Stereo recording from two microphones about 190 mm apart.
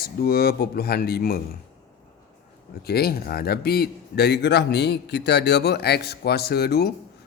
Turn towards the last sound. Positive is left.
turn(degrees=55)  # may be behind; listen again after turning